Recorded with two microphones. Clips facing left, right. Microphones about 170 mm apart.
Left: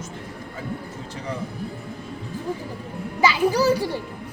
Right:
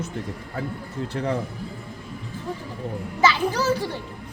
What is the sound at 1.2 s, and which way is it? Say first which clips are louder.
Speech: right 7 dB; 60° right (ahead or behind).